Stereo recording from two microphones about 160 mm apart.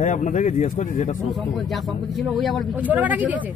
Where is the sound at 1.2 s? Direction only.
Centre (ahead or behind).